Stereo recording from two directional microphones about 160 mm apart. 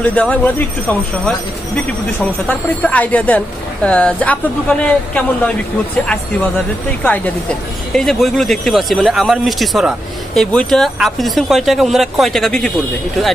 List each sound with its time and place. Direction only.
0.0 s speech: 10° left (ahead or behind)
2.4 s speech: 10° left (ahead or behind)
7.0 s speech: 10° left (ahead or behind)